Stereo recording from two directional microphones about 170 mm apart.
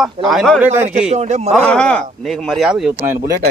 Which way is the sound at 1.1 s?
40° right (ahead or behind).